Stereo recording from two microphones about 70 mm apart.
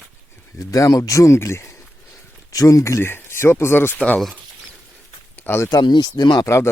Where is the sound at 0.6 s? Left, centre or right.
Left.